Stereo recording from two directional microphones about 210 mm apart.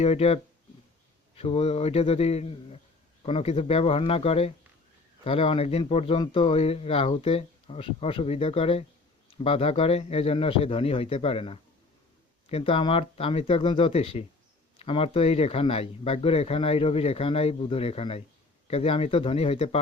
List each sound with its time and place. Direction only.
0.0 s speech: 30° left (ahead or behind)
1.4 s speech: 30° left (ahead or behind)